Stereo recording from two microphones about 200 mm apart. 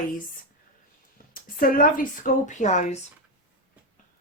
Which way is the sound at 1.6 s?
45° left (ahead or behind).